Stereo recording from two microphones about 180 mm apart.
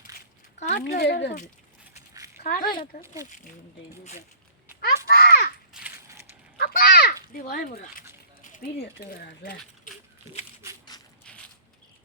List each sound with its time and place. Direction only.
0.6 s speech: 40° left (ahead or behind)
0.9 s speech: 65° left (ahead or behind)
2.4 s speech: 55° left (ahead or behind)
3.2 s speech: 45° left (ahead or behind)
5.0 s a sound: 55° left (ahead or behind)
5.7 s crushing: 5° right (ahead or behind)
6.6 s a sound: 55° left (ahead or behind)
8.4 s speech: 50° left (ahead or behind)
10.9 s rattle: 20° left (ahead or behind)